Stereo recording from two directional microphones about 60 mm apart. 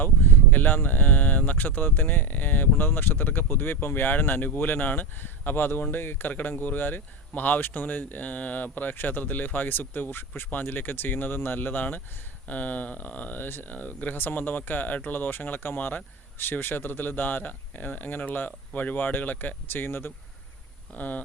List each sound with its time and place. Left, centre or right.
0.0 s speech: left
20.9 s speech: left